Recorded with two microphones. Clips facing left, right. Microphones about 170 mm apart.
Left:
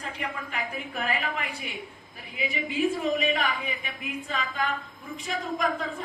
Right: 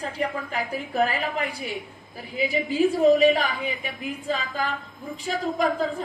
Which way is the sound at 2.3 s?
35° right (ahead or behind).